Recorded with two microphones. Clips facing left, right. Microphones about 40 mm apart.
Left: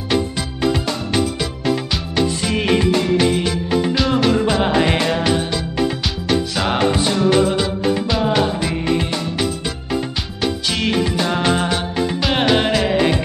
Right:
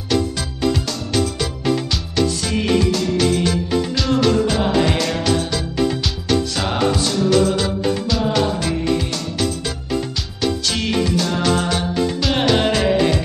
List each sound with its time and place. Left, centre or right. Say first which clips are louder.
0.8 s music: left 2 dB; left
10.4 s music: left 1 dB; centre